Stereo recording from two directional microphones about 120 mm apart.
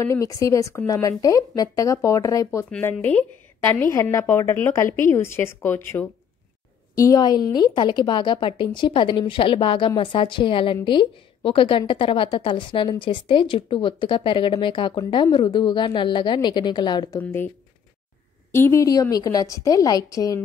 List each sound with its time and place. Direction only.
0.0 s a woman's voice: 25° left (ahead or behind)
2.8 s a woman's voice: 15° left (ahead or behind)
7.0 s a woman's voice: 30° left (ahead or behind)
17.2 s a woman's voice: 20° left (ahead or behind)
18.5 s a woman's voice: 20° left (ahead or behind)